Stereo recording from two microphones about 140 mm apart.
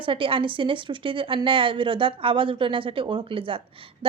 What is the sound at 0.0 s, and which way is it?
Speech, 40° right (ahead or behind).